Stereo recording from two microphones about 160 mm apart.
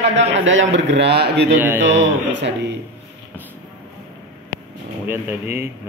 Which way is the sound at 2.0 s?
90° right.